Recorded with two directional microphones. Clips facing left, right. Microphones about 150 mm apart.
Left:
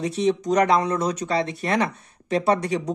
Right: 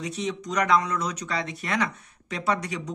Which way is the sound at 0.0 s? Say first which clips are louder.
Left 9 dB; 30° left (ahead or behind).